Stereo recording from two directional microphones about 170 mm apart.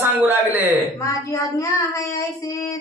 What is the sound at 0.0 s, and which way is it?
Speech, 10° right (ahead or behind).